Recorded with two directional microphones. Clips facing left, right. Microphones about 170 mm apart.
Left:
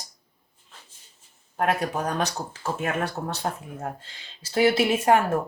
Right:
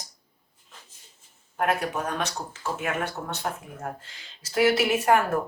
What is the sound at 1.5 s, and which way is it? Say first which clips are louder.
Speech: left 1 dB; 35° left (ahead or behind).